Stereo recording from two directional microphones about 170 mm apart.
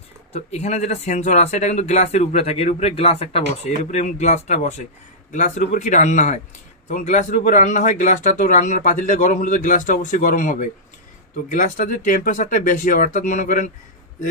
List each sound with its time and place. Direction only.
0.3 s a man's voice: 40° left (ahead or behind)